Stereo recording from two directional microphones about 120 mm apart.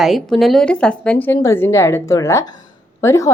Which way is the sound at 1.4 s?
20° left (ahead or behind).